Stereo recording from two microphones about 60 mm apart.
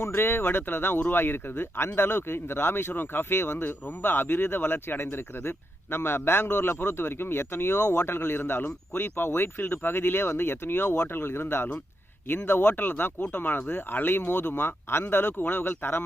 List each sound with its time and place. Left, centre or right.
0.1 s speech: left